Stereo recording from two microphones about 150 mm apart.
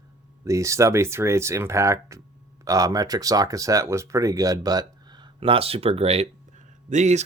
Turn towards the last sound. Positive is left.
turn(degrees=-50)  # may be behind; listen again after turning